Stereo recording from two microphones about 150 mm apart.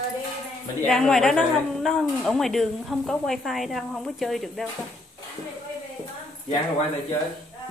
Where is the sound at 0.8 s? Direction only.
5° left (ahead or behind).